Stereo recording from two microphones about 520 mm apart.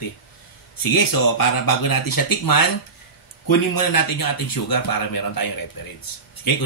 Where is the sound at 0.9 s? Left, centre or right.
Left.